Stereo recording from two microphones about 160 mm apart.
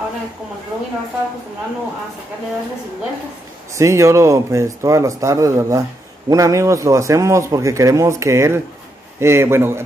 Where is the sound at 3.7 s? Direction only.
20° right (ahead or behind).